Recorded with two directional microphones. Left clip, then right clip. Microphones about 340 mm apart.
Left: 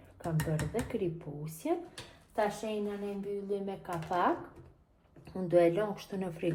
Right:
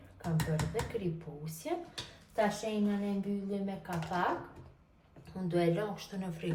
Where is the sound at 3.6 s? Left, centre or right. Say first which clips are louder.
Left 2 dB; left.